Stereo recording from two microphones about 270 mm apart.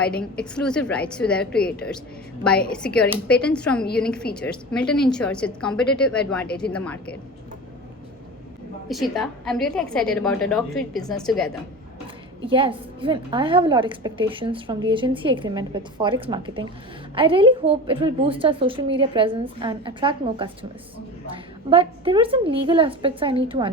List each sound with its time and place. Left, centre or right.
0.0 s a woman's voice: centre
8.9 s a woman's voice: centre
12.5 s a woman's voice: centre